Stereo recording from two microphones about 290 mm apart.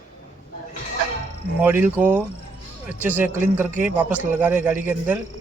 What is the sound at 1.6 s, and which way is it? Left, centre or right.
A man's voice, centre.